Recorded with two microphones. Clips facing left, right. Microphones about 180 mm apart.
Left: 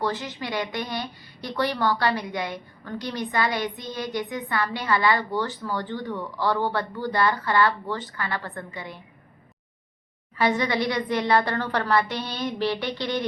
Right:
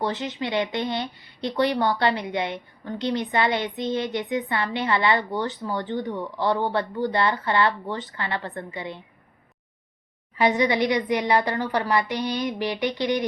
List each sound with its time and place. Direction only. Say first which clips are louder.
0.0 s speech: right 2 dB; 20° right (ahead or behind)
10.3 s a woman's voice: right 2 dB; 15° right (ahead or behind)